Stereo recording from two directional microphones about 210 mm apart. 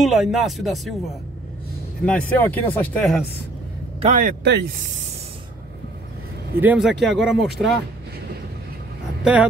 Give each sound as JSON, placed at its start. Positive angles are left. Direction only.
{"t": 0.0, "sound": "speech", "side_deg": 0}
{"t": 4.0, "sound": "a man's voice", "side_deg": -40}
{"t": 6.6, "sound": "speech", "side_deg": -5}
{"t": 9.2, "sound": "speech", "side_deg": -5}